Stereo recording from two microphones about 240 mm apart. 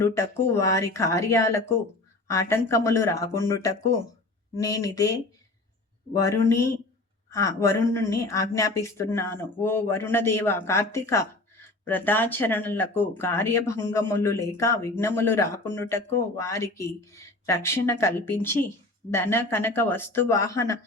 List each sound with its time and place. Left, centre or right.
0.0 s speech: centre
6.2 s speech: centre